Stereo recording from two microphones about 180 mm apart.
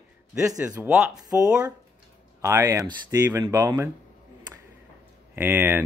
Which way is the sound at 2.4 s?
15° right (ahead or behind).